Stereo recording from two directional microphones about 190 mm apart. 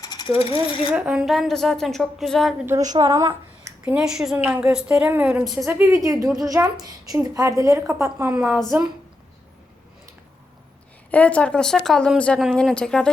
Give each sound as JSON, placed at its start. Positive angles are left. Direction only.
{"t": 0.0, "sound": "mechanisms", "side_deg": 25}
{"t": 0.9, "sound": "speech", "side_deg": -5}
{"t": 2.6, "sound": "a woman's voice", "side_deg": -20}
{"t": 3.8, "sound": "a woman's voice", "side_deg": -5}
{"t": 11.1, "sound": "speech", "side_deg": 5}